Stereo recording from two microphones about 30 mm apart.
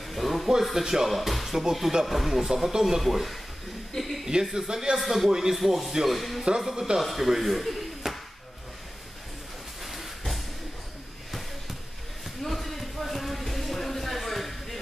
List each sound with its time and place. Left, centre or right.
0.0 s music: centre
0.7 s speech: centre
1.1 s speech: centre
3.0 s speech: centre
5.3 s speech: centre
5.6 s speech: centre
8.0 s a sound: centre
9.8 s a sound: centre
12.4 s a sound: centre